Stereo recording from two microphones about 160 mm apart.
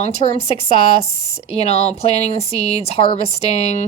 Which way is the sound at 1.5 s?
40° left (ahead or behind).